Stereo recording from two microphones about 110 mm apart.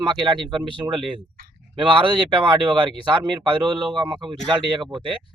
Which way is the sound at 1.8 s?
50° right (ahead or behind).